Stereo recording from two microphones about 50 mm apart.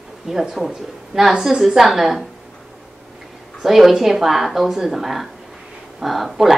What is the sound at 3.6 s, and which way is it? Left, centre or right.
A woman's voice, centre.